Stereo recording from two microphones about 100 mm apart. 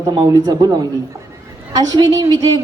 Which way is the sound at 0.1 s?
40° right (ahead or behind).